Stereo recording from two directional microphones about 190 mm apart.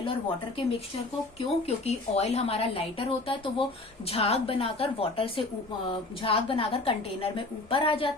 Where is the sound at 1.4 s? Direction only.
35° left (ahead or behind).